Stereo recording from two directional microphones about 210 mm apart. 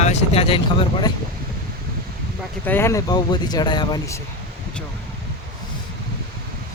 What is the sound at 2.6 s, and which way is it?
Speech, 10° left (ahead or behind).